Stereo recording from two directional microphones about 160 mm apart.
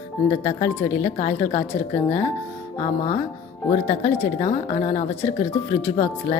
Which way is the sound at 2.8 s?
45° left (ahead or behind).